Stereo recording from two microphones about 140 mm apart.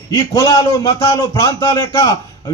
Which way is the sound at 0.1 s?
25° left (ahead or behind).